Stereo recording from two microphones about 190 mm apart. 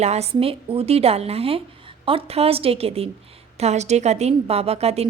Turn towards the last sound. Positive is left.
turn(degrees=-35)  # may be behind; listen again after turning